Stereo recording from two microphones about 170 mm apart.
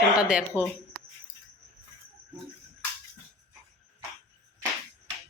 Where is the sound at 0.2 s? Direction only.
5° right (ahead or behind).